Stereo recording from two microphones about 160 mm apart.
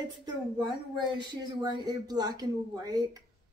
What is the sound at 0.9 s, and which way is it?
Speech, 25° right (ahead or behind).